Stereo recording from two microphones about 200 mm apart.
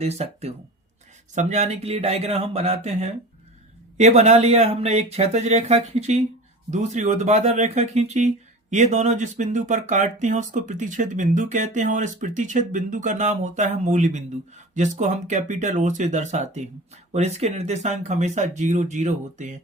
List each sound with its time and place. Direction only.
0.0 s speech: 30° right (ahead or behind)